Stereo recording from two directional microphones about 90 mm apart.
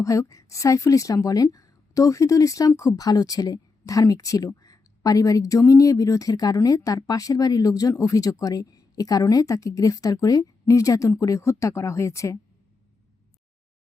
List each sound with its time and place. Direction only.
0.0 s a woman's voice: 35° left (ahead or behind)